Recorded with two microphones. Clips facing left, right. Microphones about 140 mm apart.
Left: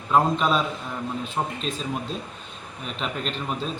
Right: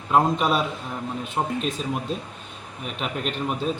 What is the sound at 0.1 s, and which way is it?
A man's voice, 10° right (ahead or behind).